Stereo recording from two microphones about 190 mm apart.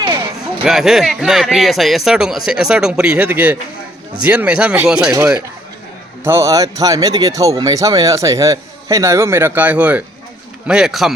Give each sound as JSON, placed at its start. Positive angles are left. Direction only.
{"t": 0.6, "sound": "speech", "side_deg": 0}